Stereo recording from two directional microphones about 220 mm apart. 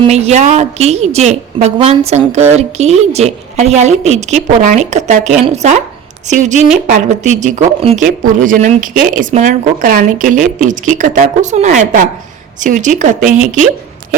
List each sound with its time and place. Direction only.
0.0 s a woman's voice: 30° right (ahead or behind)